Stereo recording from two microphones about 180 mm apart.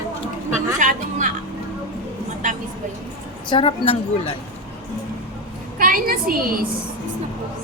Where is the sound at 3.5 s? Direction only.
30° left (ahead or behind).